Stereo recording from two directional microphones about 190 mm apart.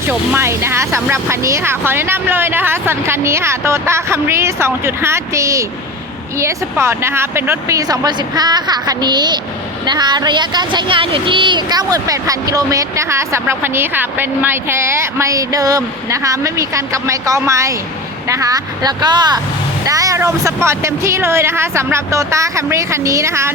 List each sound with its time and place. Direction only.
0.1 s speech: 10° right (ahead or behind)